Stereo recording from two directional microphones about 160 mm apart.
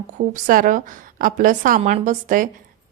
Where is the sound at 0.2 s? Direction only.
60° right (ahead or behind).